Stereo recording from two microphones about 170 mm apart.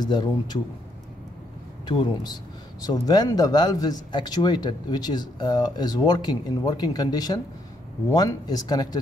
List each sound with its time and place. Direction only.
0.0 s a man's voice: 25° left (ahead or behind)
1.9 s a man's voice: 25° left (ahead or behind)